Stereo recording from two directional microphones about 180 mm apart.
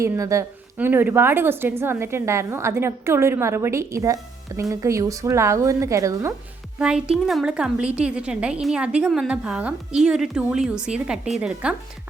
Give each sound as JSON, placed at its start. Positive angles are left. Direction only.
{"t": 0.0, "sound": "a woman's voice", "side_deg": -15}
{"t": 6.7, "sound": "a woman's voice", "side_deg": -5}